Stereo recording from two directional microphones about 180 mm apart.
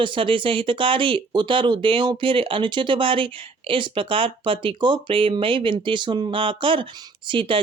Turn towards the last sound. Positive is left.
turn(degrees=-30)  # may be behind; listen again after turning